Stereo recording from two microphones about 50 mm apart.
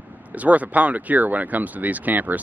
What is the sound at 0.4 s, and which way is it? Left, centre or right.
Speech, right.